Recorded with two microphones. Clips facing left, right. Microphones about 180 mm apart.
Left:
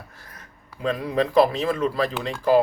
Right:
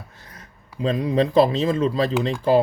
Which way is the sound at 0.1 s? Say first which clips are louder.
Right 1 dB; 20° right (ahead or behind).